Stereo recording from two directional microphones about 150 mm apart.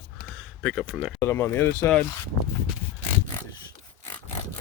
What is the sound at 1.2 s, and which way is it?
Speech, 15° left (ahead or behind).